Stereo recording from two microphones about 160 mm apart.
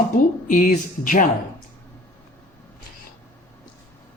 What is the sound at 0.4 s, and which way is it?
Speech, 55° left (ahead or behind).